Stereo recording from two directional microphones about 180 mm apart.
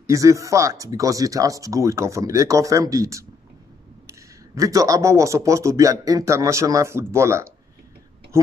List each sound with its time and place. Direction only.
0.0 s speech: 15° right (ahead or behind)